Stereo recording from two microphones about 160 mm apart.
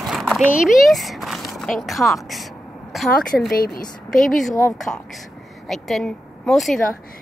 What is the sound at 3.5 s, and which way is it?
Speech, 65° left (ahead or behind).